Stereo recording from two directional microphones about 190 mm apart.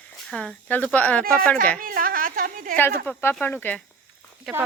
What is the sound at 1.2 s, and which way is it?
A woman's voice, 50° right (ahead or behind).